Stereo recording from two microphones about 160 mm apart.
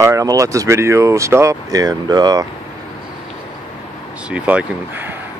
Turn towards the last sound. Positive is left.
turn(degrees=-10)  # may be behind; listen again after turning